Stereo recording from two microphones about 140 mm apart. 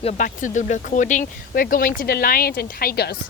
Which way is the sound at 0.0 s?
55° left (ahead or behind).